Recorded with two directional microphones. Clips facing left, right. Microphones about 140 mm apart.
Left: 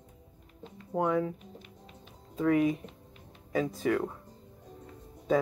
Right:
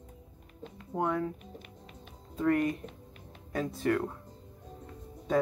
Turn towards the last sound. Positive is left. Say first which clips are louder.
# left 1 dB
turn(degrees=0)  # may be behind; listen again after turning